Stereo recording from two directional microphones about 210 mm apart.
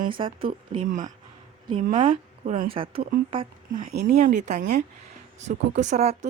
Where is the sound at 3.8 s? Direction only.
45° right (ahead or behind).